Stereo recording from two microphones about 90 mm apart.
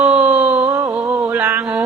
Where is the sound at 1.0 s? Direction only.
20° right (ahead or behind).